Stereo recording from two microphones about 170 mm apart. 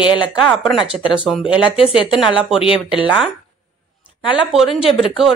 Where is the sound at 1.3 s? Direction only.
5° right (ahead or behind).